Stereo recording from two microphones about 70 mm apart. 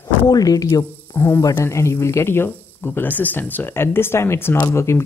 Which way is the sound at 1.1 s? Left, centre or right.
Left.